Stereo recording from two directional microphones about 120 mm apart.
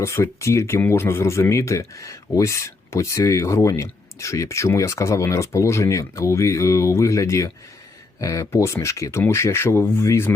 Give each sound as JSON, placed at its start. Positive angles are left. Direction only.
{"t": 0.0, "sound": "speech", "side_deg": 20}